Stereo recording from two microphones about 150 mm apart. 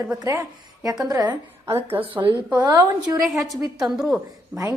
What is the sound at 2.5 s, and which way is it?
Speech, 25° right (ahead or behind).